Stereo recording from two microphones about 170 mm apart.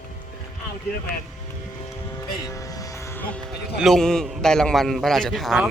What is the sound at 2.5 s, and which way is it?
Music, 20° left (ahead or behind).